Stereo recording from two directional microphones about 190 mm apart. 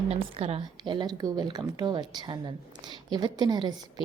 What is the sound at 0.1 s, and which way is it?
A woman's voice, 30° right (ahead or behind).